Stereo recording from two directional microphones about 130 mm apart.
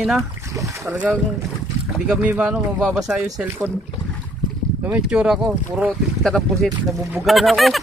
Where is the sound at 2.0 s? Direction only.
10° right (ahead or behind).